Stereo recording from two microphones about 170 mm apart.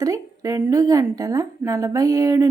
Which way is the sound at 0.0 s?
20° right (ahead or behind).